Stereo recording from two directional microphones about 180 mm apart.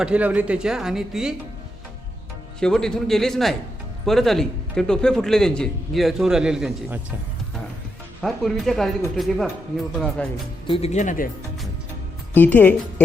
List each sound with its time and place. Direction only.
0.0 s a man's voice: 5° right (ahead or behind)
2.6 s a man's voice: 5° left (ahead or behind)
8.2 s a man's voice: centre (ahead or behind)
10.7 s speech: 35° left (ahead or behind)
12.3 s a woman's voice: 10° left (ahead or behind)